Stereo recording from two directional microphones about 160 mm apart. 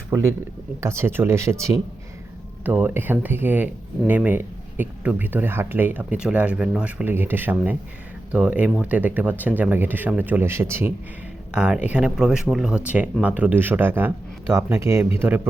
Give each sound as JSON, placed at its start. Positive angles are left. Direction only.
{"t": 0.1, "sound": "speech", "side_deg": -15}